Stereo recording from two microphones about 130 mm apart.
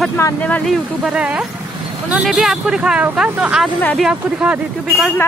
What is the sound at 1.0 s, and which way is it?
Speech, 10° right (ahead or behind).